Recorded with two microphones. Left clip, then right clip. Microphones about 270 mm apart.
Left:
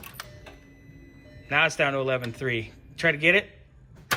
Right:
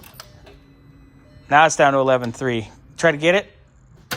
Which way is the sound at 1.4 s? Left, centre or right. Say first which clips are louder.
Right 9 dB; centre.